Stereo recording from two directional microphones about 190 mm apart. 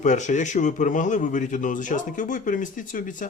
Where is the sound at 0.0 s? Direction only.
40° left (ahead or behind).